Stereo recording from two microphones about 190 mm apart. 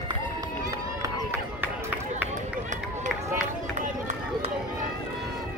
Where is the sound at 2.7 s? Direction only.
40° right (ahead or behind).